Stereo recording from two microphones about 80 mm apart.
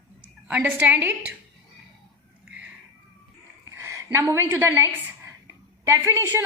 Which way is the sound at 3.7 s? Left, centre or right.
Right.